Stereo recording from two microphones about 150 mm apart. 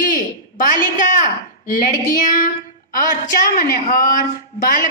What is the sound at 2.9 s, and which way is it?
A woman's voice, 70° left (ahead or behind).